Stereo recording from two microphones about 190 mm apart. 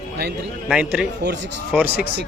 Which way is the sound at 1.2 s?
65° right (ahead or behind).